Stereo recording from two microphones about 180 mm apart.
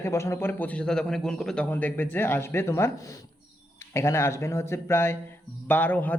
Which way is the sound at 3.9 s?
15° left (ahead or behind).